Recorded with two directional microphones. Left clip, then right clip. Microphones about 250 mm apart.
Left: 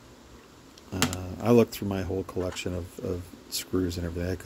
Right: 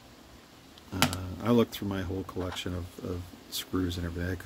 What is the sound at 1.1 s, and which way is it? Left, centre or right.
Speech, centre.